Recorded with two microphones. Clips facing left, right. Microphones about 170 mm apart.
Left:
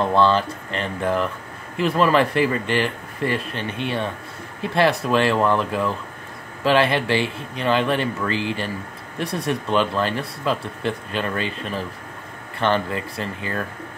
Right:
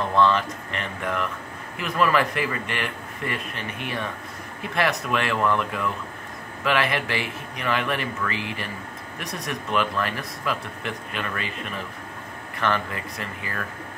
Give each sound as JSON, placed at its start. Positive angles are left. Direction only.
{"t": 0.0, "sound": "speech", "side_deg": 30}